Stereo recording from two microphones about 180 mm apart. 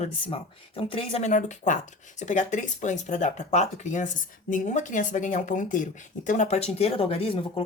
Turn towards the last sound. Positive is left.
turn(degrees=30)  # may be behind; listen again after turning